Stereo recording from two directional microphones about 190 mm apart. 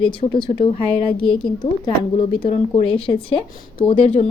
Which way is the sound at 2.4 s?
30° left (ahead or behind).